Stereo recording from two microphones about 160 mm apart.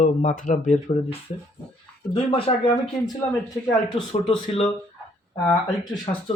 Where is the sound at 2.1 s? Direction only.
35° left (ahead or behind).